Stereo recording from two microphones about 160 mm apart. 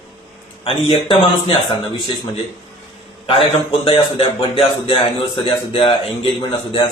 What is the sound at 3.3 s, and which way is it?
A man's voice, 35° left (ahead or behind).